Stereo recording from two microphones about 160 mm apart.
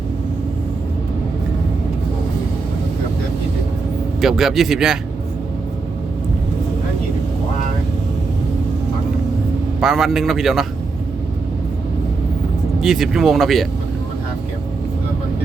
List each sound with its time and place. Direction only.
4.2 s a man's voice: centre (ahead or behind)
9.8 s a man's voice: centre (ahead or behind)
12.8 s a man's voice: 5° right (ahead or behind)